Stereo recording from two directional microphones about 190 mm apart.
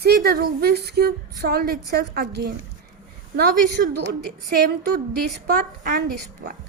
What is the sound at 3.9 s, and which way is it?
Speech, 60° right (ahead or behind).